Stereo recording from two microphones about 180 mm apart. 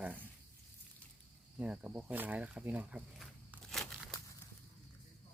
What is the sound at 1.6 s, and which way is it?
Speech, 5° right (ahead or behind).